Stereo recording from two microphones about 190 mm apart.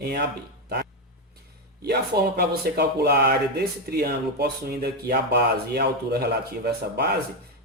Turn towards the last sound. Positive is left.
turn(degrees=-60)  # may be behind; listen again after turning